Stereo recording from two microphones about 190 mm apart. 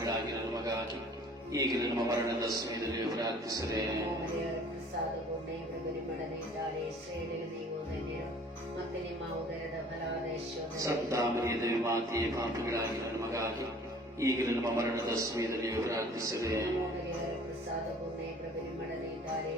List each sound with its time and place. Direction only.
1.5 s a man's voice: 20° right (ahead or behind)
10.8 s a man's voice: 15° right (ahead or behind)